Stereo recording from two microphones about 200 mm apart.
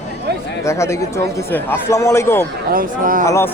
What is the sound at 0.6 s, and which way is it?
Speech, 15° left (ahead or behind).